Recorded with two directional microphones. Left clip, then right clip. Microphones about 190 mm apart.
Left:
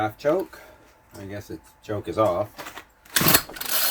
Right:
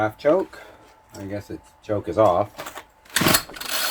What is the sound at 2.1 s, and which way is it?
Speech, 30° right (ahead or behind).